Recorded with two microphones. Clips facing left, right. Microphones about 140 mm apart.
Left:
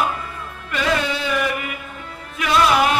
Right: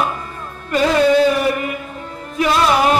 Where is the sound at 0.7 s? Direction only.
40° right (ahead or behind).